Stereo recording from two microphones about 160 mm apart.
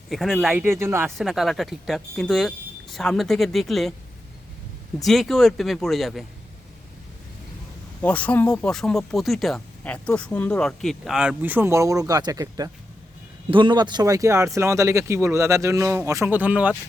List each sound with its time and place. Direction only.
0.1 s speech: centre (ahead or behind)
0.5 s speech: 15° right (ahead or behind)
1.2 s speech: centre (ahead or behind)
5.0 s speech: centre (ahead or behind)
8.0 s speech: 10° left (ahead or behind); by 16.7 s 10° right (ahead or behind)